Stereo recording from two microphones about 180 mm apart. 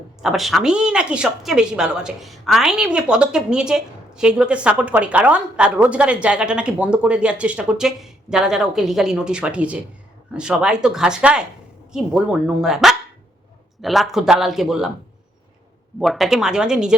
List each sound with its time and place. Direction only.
0.2 s speech: centre (ahead or behind)
16.0 s speech: centre (ahead or behind)